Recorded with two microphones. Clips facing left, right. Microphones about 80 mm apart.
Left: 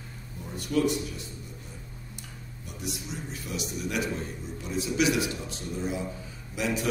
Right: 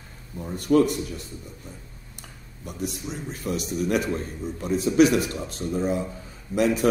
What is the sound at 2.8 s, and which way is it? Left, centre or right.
A man's voice, right.